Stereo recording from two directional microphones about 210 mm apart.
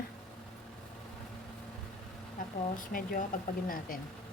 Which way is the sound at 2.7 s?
40° left (ahead or behind).